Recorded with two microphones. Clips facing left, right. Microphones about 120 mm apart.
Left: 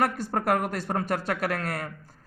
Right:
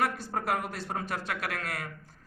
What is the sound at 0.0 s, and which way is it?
A man's voice, 50° left (ahead or behind).